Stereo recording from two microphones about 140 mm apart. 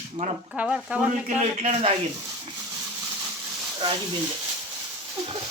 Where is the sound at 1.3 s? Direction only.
55° right (ahead or behind).